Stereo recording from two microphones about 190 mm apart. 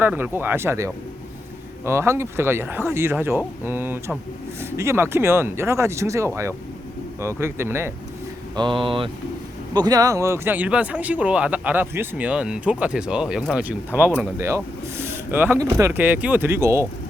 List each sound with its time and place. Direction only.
0.0 s speech: 10° right (ahead or behind)
8.5 s speech: 25° right (ahead or behind)